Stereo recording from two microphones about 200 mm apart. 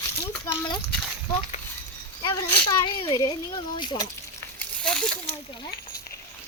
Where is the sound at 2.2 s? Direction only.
20° left (ahead or behind); by 5.1 s 5° left (ahead or behind).